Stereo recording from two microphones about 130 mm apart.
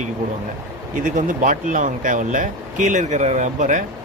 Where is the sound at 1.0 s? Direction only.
85° right.